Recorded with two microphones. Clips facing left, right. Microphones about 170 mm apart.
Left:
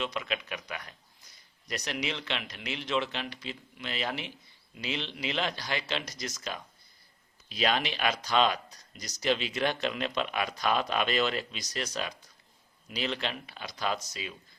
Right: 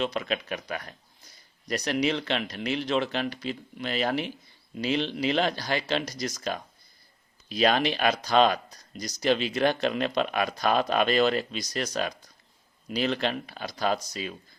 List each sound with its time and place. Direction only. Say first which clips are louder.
0.0 s speech: right 5 dB; 40° right (ahead or behind)
2.0 s speech: right 9 dB; 40° right (ahead or behind)